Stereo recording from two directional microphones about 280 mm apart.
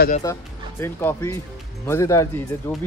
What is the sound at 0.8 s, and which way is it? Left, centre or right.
Speech, centre.